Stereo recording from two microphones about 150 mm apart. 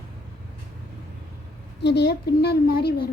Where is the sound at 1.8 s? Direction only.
90° left.